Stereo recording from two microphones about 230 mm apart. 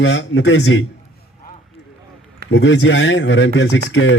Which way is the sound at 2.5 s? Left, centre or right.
Left.